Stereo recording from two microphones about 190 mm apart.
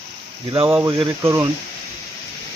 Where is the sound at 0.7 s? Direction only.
10° right (ahead or behind).